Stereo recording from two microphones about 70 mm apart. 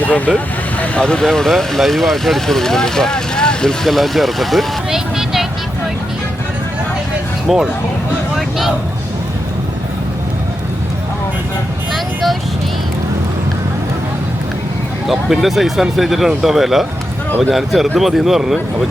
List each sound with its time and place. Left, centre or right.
0.0 s speech: left; by 5.5 s centre
7.4 s speech: centre
8.4 s vehicle: centre
15.0 s speech: centre